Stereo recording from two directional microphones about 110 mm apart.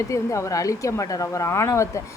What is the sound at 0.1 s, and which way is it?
Speech, 30° left (ahead or behind).